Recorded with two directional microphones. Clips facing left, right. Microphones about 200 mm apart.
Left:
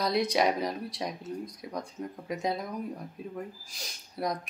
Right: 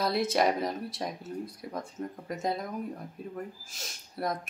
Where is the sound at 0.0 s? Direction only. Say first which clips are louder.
Even; 5° right (ahead or behind).